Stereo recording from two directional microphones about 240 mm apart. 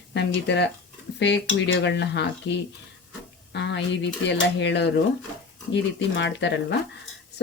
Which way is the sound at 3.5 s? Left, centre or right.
Left.